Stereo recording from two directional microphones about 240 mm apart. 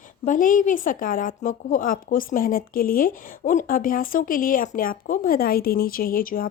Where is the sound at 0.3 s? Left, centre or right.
Left.